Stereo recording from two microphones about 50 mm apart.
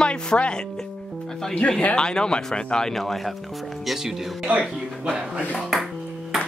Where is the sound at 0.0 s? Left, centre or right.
Centre.